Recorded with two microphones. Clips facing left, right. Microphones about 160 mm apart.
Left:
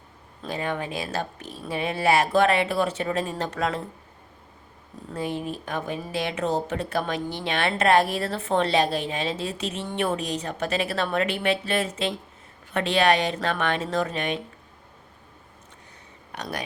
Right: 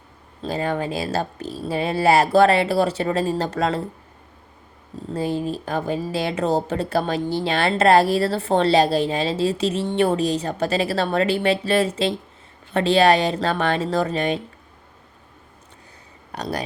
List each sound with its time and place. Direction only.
0.4 s speech: 35° right (ahead or behind)
5.1 s speech: 35° right (ahead or behind)
16.3 s speech: 35° right (ahead or behind)